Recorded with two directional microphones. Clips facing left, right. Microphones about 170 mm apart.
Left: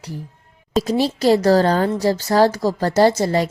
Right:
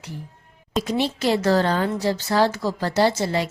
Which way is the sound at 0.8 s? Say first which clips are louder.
Left 5 dB; 35° left (ahead or behind).